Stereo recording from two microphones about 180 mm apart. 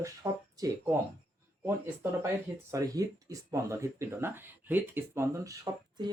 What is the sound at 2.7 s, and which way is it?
Speech, 20° right (ahead or behind).